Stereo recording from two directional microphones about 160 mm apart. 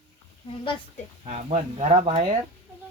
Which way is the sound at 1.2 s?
40° right (ahead or behind).